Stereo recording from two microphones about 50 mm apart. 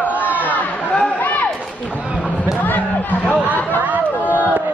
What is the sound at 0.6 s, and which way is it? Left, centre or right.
Chatter, left.